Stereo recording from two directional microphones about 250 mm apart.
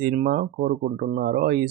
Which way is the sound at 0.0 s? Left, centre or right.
Right.